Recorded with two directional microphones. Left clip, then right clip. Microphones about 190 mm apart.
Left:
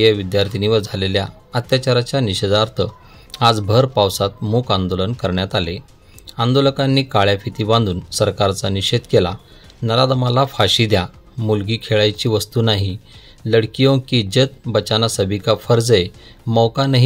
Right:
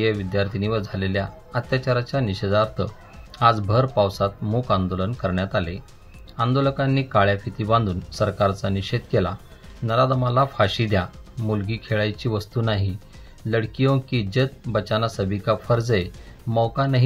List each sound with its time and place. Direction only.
0.0 s speech: 40° left (ahead or behind)